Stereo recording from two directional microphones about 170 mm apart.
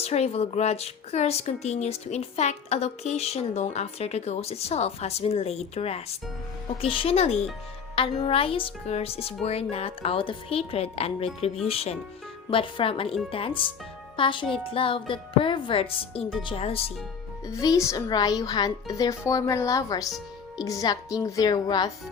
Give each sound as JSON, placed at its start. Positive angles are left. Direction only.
{"t": 0.0, "sound": "a child's voice", "side_deg": 40}
{"t": 17.4, "sound": "speech", "side_deg": 20}
{"t": 20.1, "sound": "music", "side_deg": 0}
{"t": 20.7, "sound": "speech", "side_deg": 20}